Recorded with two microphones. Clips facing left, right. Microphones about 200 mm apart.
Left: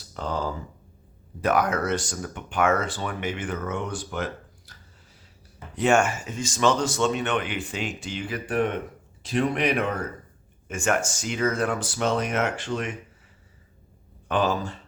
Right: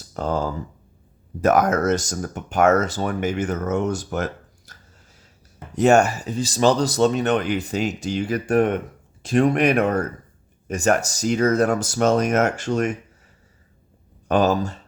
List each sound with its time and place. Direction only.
0.1 s a sound: 45° right (ahead or behind)
1.4 s speech: 45° right (ahead or behind)
14.3 s speech: 40° right (ahead or behind)